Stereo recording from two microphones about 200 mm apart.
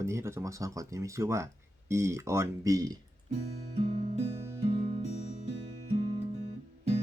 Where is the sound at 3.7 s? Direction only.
35° right (ahead or behind).